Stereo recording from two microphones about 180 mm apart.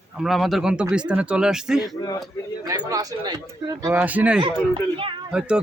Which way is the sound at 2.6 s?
20° right (ahead or behind).